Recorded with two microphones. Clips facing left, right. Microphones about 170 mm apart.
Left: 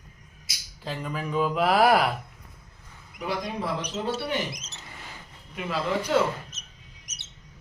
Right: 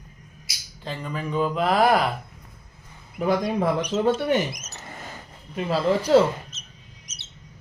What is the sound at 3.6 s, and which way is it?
Speech, 50° right (ahead or behind).